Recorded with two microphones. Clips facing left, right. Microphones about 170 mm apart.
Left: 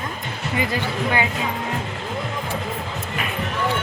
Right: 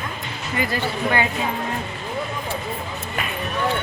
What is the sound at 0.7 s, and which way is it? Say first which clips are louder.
Speech: right 3 dB; 10° left (ahead or behind).